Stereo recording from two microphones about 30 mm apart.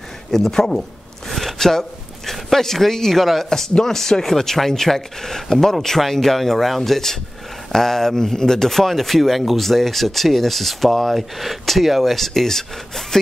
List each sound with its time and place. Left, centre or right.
0.3 s speech: centre
0.6 s a man's voice: left
1.6 s a sound: centre
2.3 s speech: centre